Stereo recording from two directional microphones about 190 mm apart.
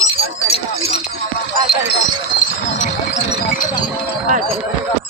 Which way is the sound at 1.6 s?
55° left (ahead or behind).